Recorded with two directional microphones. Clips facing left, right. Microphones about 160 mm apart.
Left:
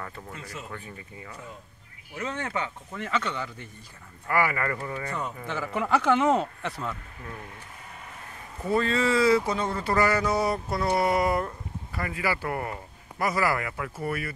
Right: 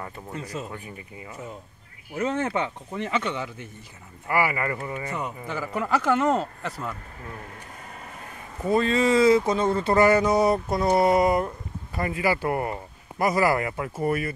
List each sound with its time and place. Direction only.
0.0 s a man's voice: 20° right (ahead or behind)
8.6 s speech: 20° right (ahead or behind)